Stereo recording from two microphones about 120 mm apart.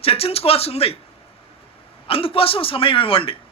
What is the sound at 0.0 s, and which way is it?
Speech, 55° left (ahead or behind).